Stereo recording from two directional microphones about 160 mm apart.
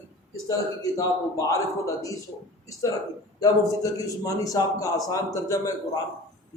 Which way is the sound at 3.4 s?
20° left (ahead or behind).